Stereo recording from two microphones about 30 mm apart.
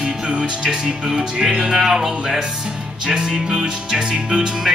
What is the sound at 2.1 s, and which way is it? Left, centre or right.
Music, right.